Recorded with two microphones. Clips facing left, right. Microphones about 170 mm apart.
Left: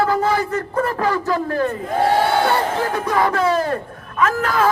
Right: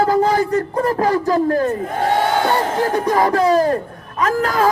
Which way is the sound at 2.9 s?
35° right (ahead or behind).